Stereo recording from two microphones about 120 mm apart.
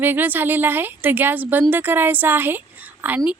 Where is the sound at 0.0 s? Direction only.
15° right (ahead or behind).